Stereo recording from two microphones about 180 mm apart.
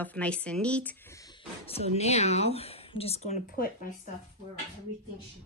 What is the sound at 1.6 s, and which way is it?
Speech, 35° left (ahead or behind).